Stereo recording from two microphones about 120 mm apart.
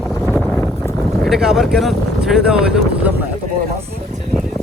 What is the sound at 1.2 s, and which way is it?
Speech, 5° right (ahead or behind).